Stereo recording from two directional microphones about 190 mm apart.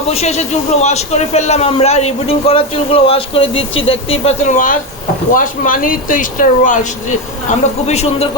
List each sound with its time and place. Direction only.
0.1 s a man's voice: 35° left (ahead or behind)
7.9 s a man's voice: 35° left (ahead or behind)